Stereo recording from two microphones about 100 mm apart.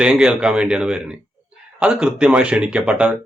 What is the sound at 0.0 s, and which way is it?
Speech, 10° right (ahead or behind).